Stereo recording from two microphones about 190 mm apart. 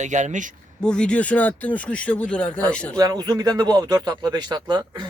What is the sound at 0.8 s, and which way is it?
Speech, 5° left (ahead or behind).